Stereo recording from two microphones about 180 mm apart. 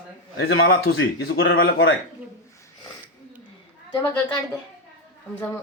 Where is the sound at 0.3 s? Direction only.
60° left (ahead or behind); by 1.9 s 75° left (ahead or behind).